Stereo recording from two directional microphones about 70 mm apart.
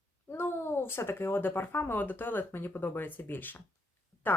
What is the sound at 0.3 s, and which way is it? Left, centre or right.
Speech, left.